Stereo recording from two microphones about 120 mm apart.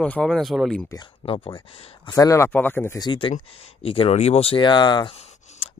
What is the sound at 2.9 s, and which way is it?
Speech, 40° left (ahead or behind).